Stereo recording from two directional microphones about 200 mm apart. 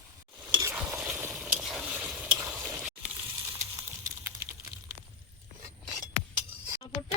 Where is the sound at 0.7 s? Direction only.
5° right (ahead or behind).